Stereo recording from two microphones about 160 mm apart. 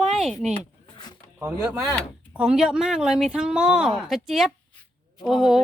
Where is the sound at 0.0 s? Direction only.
Centre (ahead or behind).